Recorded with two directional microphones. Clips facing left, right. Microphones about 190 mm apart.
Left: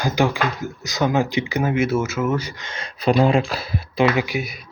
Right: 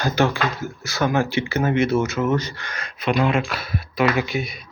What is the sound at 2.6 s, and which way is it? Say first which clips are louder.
Speech: left 4 dB; 25° left (ahead or behind).